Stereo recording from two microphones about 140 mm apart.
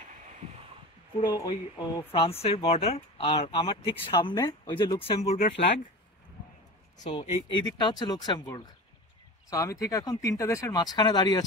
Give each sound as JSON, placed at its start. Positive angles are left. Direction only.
{"t": 1.2, "sound": "speech", "side_deg": 30}
{"t": 2.1, "sound": "speech", "side_deg": 40}
{"t": 7.2, "sound": "speech", "side_deg": 35}